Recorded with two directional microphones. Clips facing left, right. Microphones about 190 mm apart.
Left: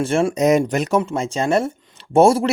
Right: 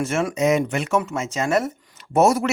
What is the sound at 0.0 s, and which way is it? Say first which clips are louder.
Speech: left 4 dB; 30° left (ahead or behind).